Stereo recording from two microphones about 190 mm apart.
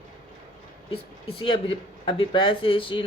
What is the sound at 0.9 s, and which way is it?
Speech, 30° left (ahead or behind).